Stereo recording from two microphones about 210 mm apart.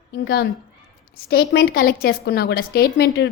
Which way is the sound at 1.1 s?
50° left (ahead or behind).